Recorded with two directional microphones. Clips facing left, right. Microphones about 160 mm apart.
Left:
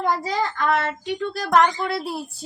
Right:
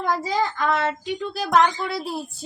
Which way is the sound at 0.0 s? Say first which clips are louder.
Even; 5° right (ahead or behind).